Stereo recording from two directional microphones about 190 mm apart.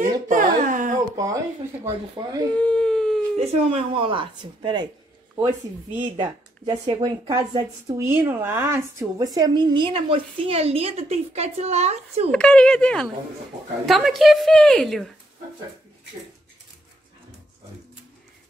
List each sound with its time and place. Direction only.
0.0 s a sound: 40° right (ahead or behind)
1.1 s a sound: 20° right (ahead or behind)
2.1 s a woman's voice: 20° right (ahead or behind)
2.5 s speech: 5° left (ahead or behind)
3.3 s a woman's voice: 30° right (ahead or behind)
5.3 s a woman's voice: 15° right (ahead or behind); by 12.3 s 35° right (ahead or behind)
12.3 s a woman's voice: 5° left (ahead or behind)